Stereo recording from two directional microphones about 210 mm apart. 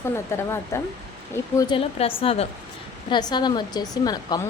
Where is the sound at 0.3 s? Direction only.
15° left (ahead or behind).